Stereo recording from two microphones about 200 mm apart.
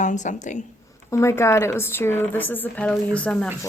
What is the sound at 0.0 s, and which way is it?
Speech, 40° left (ahead or behind).